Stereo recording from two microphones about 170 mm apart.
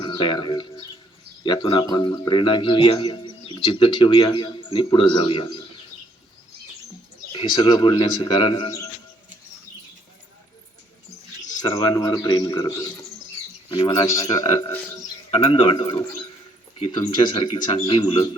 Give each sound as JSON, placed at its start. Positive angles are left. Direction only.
{"t": 0.0, "sound": "a man's voice", "side_deg": 25}
{"t": 7.3, "sound": "a man's voice", "side_deg": 25}
{"t": 11.6, "sound": "a man's voice", "side_deg": 20}